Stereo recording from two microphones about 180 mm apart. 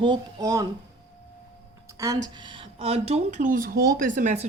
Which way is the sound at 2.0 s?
20° right (ahead or behind).